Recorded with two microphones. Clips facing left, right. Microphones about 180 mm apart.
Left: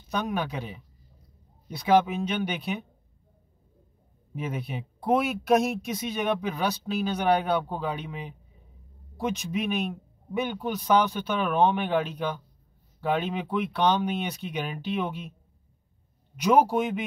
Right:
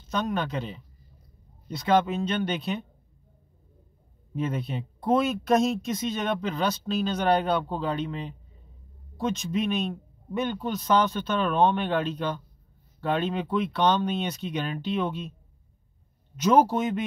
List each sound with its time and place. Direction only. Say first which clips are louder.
0.1 s speech: right 1 dB; 10° left (ahead or behind)
4.4 s speech: right 3 dB; 10° left (ahead or behind)
16.3 s speech: even; 10° left (ahead or behind)